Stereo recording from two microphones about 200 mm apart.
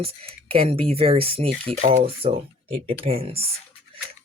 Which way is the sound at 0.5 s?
25° right (ahead or behind).